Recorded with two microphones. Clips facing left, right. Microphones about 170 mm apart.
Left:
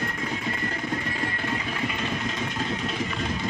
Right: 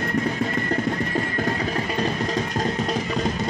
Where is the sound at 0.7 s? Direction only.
45° right (ahead or behind).